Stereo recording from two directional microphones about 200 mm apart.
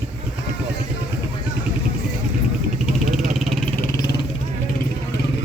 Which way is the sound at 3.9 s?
20° left (ahead or behind).